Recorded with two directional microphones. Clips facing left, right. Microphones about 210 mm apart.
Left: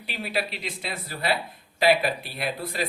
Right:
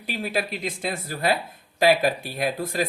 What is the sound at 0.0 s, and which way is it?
Speech, 45° right (ahead or behind).